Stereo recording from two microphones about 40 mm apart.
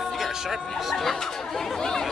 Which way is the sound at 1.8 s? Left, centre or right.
Centre.